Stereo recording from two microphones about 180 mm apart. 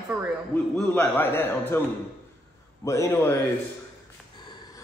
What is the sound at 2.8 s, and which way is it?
Speech, 15° left (ahead or behind).